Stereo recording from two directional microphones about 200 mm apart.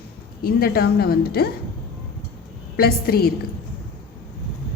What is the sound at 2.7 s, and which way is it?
Speech, 50° left (ahead or behind).